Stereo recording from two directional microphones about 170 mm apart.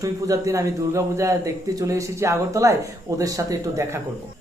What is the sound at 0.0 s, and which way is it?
A man's voice, 20° right (ahead or behind).